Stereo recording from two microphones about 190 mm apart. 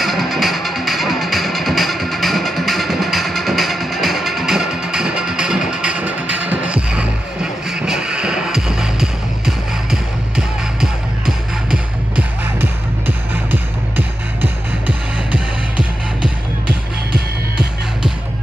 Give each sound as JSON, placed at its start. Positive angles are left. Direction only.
{"t": 0.0, "sound": "music", "side_deg": 0}